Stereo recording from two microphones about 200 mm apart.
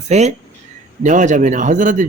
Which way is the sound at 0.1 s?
35° right (ahead or behind).